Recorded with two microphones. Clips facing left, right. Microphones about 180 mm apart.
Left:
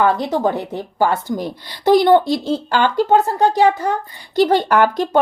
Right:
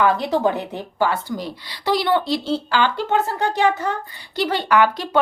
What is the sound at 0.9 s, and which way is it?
Speech, 45° left (ahead or behind).